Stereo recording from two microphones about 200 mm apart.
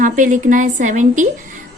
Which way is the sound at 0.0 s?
40° right (ahead or behind).